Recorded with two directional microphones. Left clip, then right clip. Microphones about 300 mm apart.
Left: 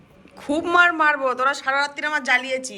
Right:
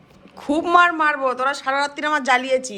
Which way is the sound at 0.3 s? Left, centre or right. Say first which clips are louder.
Right 2 dB; centre.